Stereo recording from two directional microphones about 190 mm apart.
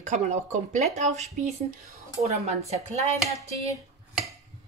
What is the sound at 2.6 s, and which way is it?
Speech, 35° right (ahead or behind).